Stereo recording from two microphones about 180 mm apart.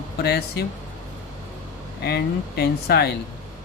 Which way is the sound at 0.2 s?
65° left (ahead or behind).